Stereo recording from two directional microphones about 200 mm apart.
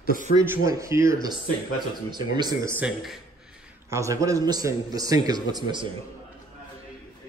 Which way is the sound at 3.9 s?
15° right (ahead or behind).